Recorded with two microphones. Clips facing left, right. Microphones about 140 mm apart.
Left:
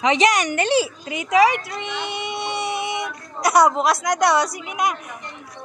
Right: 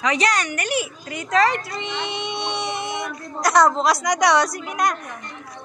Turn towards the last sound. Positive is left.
turn(degrees=5)  # may be behind; listen again after turning